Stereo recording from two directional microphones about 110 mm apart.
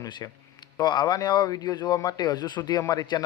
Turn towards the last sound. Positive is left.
turn(degrees=35)  # may be behind; listen again after turning